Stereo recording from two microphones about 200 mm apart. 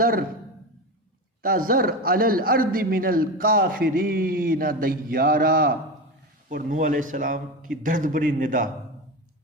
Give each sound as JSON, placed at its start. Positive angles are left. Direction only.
{"t": 0.0, "sound": "a man's voice", "side_deg": -45}
{"t": 1.4, "sound": "a man's voice", "side_deg": -45}